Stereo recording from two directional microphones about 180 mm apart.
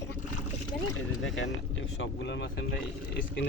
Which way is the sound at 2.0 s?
75° left (ahead or behind).